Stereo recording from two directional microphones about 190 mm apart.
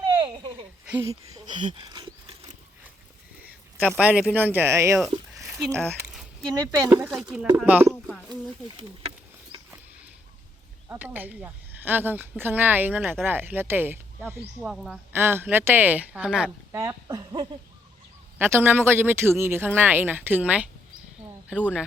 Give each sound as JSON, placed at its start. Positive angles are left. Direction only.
{"t": 0.9, "sound": "speech", "side_deg": -15}
{"t": 3.4, "sound": "speech", "side_deg": -5}
{"t": 5.5, "sound": "speech", "side_deg": 0}
{"t": 6.5, "sound": "speech", "side_deg": -20}
{"t": 8.0, "sound": "a sound", "side_deg": 0}
{"t": 10.8, "sound": "speech", "side_deg": -10}
{"t": 16.8, "sound": "speech", "side_deg": -20}
{"t": 18.3, "sound": "speech", "side_deg": -10}